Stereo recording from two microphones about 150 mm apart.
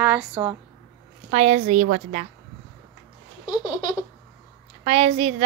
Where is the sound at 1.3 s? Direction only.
50° right (ahead or behind).